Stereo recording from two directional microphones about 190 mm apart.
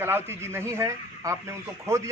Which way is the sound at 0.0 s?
10° right (ahead or behind).